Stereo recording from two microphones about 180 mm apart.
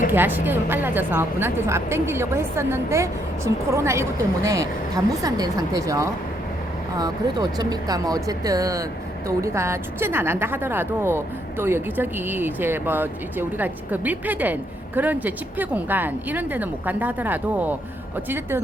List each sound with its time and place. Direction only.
0.1 s speech: 10° right (ahead or behind)